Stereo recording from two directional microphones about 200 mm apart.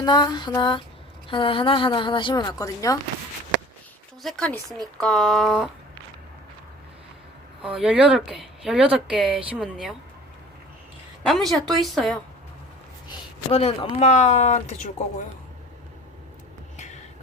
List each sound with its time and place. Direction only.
0.0 s speech: 20° left (ahead or behind)
4.2 s speech: centre (ahead or behind)
7.6 s speech: 5° right (ahead or behind)
11.3 s speech: centre (ahead or behind)
13.1 s a sound: 30° left (ahead or behind)
14.0 s speech: 35° left (ahead or behind)